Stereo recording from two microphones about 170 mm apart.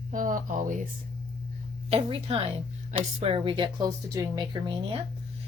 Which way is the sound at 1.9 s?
35° right (ahead or behind).